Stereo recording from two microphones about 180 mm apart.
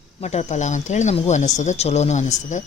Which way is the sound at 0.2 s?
40° left (ahead or behind).